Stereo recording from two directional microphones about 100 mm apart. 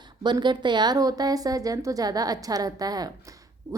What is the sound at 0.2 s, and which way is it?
A woman's voice, 50° right (ahead or behind).